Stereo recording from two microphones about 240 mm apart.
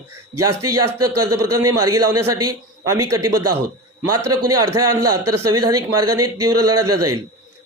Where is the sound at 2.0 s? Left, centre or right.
Centre.